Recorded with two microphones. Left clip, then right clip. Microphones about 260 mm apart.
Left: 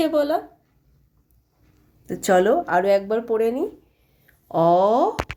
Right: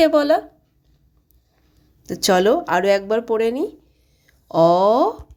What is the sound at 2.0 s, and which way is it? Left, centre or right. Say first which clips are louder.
Speech: right 1 dB; right.